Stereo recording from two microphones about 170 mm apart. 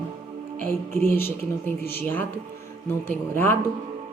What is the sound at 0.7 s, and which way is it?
A woman's voice, 15° left (ahead or behind).